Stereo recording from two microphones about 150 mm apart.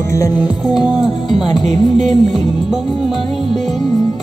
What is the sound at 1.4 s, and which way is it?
Music, 30° left (ahead or behind).